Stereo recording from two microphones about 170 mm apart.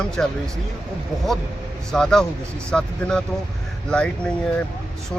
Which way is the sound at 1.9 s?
5° left (ahead or behind).